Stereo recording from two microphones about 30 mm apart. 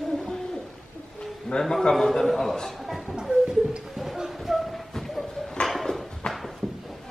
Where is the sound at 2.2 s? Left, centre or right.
Centre.